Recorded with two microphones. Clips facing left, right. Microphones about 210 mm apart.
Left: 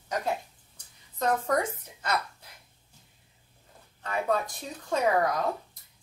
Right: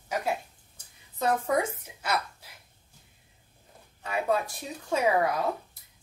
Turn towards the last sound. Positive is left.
turn(degrees=-10)  # may be behind; listen again after turning